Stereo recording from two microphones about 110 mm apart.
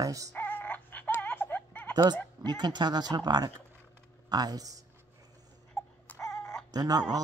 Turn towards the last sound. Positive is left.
turn(degrees=-35)  # may be behind; listen again after turning